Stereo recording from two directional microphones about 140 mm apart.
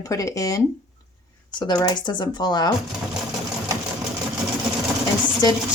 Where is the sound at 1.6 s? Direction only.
25° left (ahead or behind).